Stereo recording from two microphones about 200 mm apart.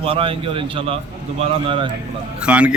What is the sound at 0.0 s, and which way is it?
Speech, 30° right (ahead or behind).